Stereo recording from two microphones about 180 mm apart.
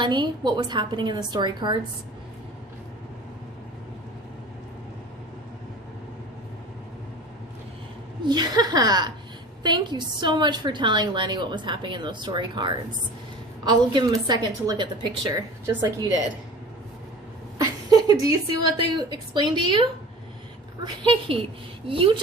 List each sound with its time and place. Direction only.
0.0 s a woman's voice: 25° right (ahead or behind)
8.2 s a woman's voice: 25° right (ahead or behind)
17.6 s a woman's voice: 20° right (ahead or behind)
20.8 s a woman's voice: 30° right (ahead or behind)